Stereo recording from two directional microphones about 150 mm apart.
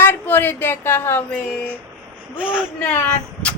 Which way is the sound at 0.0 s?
15° left (ahead or behind).